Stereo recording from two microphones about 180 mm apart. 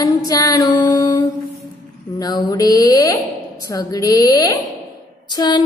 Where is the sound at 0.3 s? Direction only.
20° left (ahead or behind).